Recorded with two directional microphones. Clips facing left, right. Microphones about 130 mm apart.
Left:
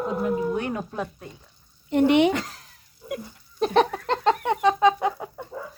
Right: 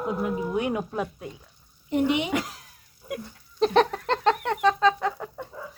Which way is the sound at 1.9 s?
65° left (ahead or behind).